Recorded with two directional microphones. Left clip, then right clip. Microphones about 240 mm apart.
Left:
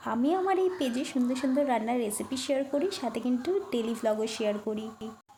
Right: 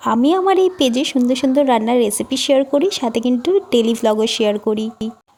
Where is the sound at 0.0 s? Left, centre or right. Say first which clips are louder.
Right 13 dB; right.